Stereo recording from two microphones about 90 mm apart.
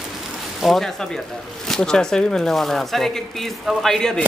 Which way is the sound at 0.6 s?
5° left (ahead or behind).